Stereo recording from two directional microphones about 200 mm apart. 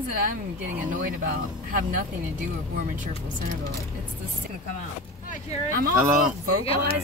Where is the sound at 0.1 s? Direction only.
45° right (ahead or behind).